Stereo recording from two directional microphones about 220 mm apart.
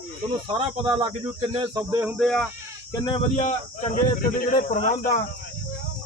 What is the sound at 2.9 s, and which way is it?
Speech, 20° left (ahead or behind).